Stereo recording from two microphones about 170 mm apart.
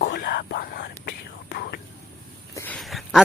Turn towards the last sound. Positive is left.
turn(degrees=0)  # may be behind; listen again after turning